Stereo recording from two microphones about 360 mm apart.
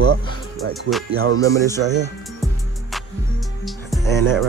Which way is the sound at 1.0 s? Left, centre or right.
Right.